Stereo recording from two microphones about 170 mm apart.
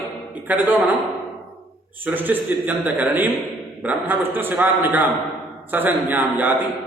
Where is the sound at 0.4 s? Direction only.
10° right (ahead or behind).